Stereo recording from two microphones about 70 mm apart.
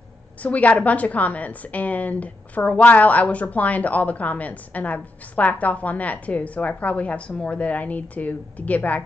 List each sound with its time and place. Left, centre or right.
0.4 s a woman's voice: left